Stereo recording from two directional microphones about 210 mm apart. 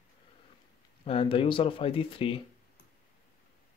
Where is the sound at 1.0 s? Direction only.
25° left (ahead or behind).